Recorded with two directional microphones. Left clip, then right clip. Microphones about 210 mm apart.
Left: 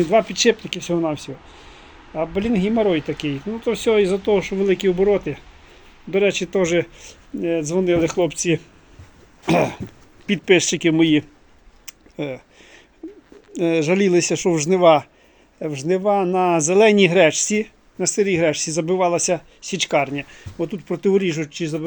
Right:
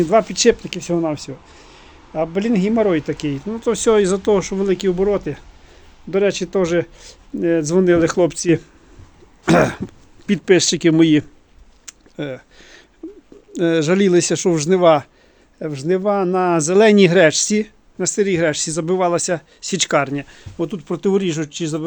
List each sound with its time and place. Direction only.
0.1 s speech: 15° right (ahead or behind)
1.7 s speech: 15° right (ahead or behind)
4.6 s speech: 5° right (ahead or behind)
7.1 s speech: 25° right (ahead or behind)
9.5 s throat clearing: 90° right
10.2 s speech: 20° right (ahead or behind)
12.1 s speech: 15° right (ahead or behind)
13.0 s bird: 25° right (ahead or behind)
13.7 s speech: 65° right (ahead or behind)
14.1 s a man's voice: 20° right (ahead or behind)
16.8 s speech: 80° right
17.2 s speech: 20° right (ahead or behind)
19.7 s throat clearing: 90° right
20.6 s speech: 20° right (ahead or behind)